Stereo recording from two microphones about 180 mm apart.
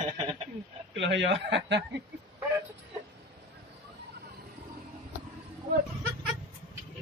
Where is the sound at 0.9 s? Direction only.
85° right.